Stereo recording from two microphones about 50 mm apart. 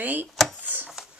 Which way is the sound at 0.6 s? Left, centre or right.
Right.